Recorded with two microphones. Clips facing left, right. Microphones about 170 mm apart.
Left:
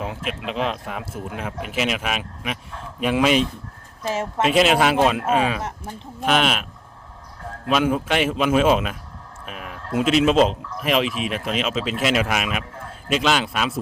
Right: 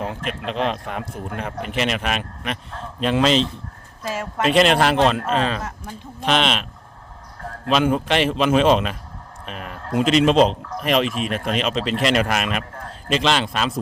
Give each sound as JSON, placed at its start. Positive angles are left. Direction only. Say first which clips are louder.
{"t": 0.0, "sound": "a man's voice", "louder": "right 1 dB", "side_deg": 5}
{"t": 4.0, "sound": "a woman's voice", "louder": "left 2 dB", "side_deg": 25}
{"t": 4.4, "sound": "a man's voice", "louder": "right 1 dB", "side_deg": 5}
{"t": 7.7, "sound": "a man's voice", "louder": "right 1 dB", "side_deg": 5}